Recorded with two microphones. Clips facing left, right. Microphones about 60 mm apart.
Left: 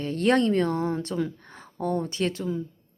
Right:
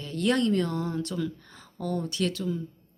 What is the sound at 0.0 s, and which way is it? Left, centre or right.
Speech, left.